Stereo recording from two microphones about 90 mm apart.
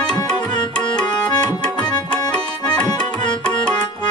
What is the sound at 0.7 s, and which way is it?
Music, 10° left (ahead or behind).